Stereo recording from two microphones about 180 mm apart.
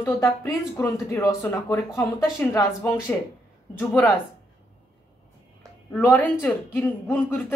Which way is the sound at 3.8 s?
Centre (ahead or behind).